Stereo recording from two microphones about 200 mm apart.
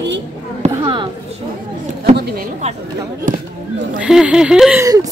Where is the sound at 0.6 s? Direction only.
25° right (ahead or behind).